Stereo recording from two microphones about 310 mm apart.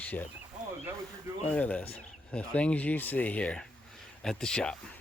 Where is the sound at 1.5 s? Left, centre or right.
Centre.